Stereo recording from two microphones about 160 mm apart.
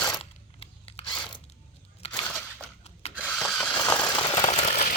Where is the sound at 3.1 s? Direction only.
10° right (ahead or behind).